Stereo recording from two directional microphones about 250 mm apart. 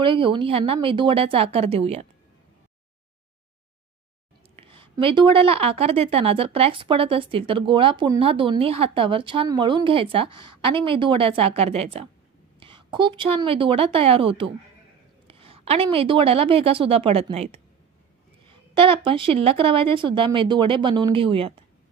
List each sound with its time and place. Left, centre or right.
0.0 s a woman's voice: centre
4.6 s a woman's voice: right